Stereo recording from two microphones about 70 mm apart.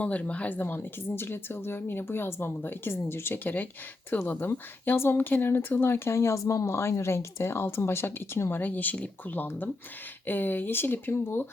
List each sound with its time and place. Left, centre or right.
0.0 s speech: centre